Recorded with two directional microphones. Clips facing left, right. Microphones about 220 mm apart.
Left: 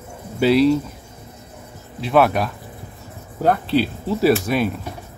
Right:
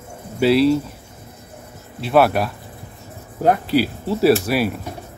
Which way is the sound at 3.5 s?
10° right (ahead or behind).